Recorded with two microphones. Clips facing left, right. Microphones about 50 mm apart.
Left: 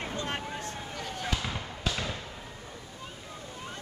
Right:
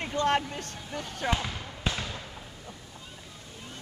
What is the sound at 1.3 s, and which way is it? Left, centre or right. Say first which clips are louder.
Speech: right 3 dB; right.